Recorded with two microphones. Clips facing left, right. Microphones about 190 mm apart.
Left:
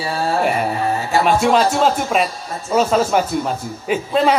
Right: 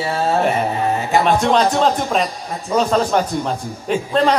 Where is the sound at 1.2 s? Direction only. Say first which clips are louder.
Left 2 dB; 5° left (ahead or behind).